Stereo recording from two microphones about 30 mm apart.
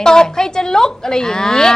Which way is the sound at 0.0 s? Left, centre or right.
Left.